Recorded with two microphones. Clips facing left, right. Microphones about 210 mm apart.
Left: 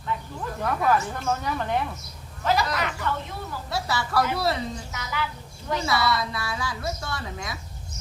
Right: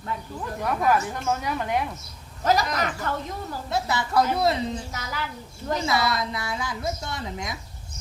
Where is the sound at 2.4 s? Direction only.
40° right (ahead or behind).